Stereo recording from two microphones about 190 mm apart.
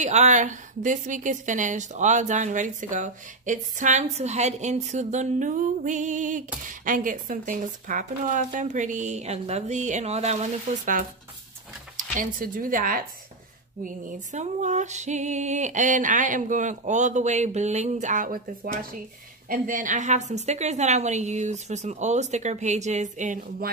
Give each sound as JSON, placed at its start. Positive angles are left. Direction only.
{"t": 0.0, "sound": "a woman's voice", "side_deg": -40}
{"t": 12.2, "sound": "a woman's voice", "side_deg": -45}